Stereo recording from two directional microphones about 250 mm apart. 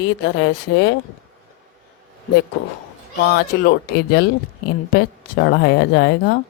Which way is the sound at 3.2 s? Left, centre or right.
Left.